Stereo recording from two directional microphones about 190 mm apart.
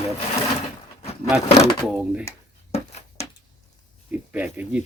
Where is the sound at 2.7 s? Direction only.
35° left (ahead or behind).